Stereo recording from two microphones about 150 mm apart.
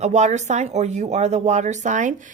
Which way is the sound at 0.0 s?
50° right (ahead or behind).